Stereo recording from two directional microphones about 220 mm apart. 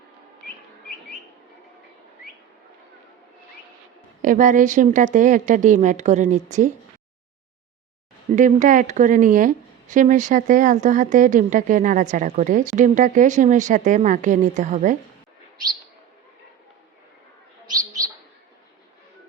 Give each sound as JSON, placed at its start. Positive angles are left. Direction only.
{"t": 4.2, "sound": "speech", "side_deg": -35}
{"t": 8.4, "sound": "speech", "side_deg": -35}